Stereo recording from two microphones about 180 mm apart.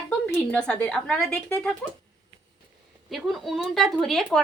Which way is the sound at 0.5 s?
5° left (ahead or behind).